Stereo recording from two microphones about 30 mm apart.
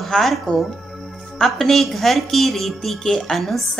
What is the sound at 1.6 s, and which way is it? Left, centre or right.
A woman's voice, centre.